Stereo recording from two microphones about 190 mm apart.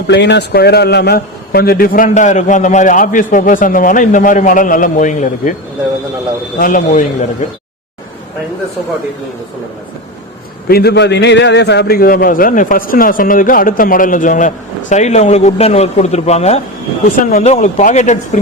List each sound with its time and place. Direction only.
0.1 s a man's voice: 65° left (ahead or behind); by 5.5 s 40° left (ahead or behind)
6.6 s a man's voice: 45° left (ahead or behind)
10.7 s a man's voice: 60° left (ahead or behind); by 18.3 s 40° left (ahead or behind)